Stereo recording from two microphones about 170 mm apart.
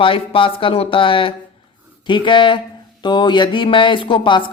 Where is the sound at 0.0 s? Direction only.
30° left (ahead or behind).